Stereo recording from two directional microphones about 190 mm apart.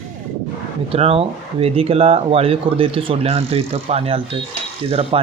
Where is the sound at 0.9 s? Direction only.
30° right (ahead or behind).